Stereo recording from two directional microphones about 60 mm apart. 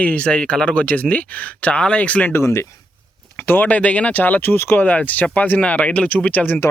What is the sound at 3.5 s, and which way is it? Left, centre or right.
Speech, left.